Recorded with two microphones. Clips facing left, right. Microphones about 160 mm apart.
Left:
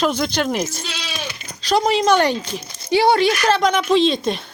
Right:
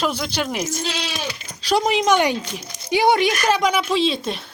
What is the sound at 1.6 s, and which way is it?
Speech, 10° right (ahead or behind).